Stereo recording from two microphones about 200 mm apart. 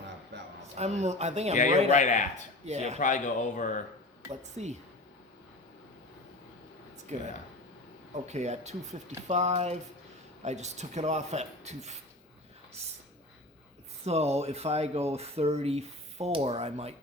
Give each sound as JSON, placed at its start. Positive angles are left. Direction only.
{"t": 0.8, "sound": "speech", "side_deg": -35}
{"t": 1.9, "sound": "speech", "side_deg": 40}
{"t": 2.6, "sound": "speech", "side_deg": -35}
{"t": 3.0, "sound": "speech", "side_deg": 40}
{"t": 4.3, "sound": "speech", "side_deg": -35}
{"t": 7.1, "sound": "speech", "side_deg": -35}
{"t": 14.0, "sound": "speech", "side_deg": -30}